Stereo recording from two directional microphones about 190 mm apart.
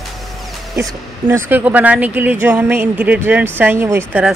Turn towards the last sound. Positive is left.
turn(degrees=-10)  # may be behind; listen again after turning